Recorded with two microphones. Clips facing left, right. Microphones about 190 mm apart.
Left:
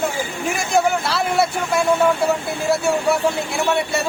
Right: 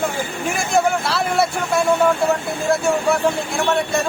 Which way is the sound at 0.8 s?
Centre (ahead or behind).